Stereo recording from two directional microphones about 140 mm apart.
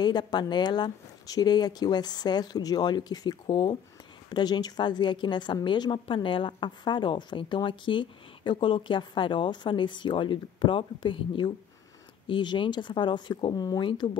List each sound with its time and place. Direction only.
0.0 s a woman's voice: 30° left (ahead or behind)